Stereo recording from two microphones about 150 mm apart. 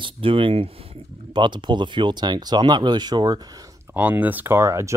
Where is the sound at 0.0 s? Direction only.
35° right (ahead or behind).